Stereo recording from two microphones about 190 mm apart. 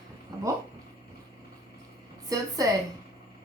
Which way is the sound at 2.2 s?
20° right (ahead or behind).